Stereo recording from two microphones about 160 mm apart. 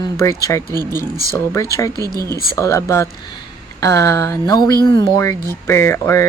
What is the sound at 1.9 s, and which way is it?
Speech, 20° right (ahead or behind).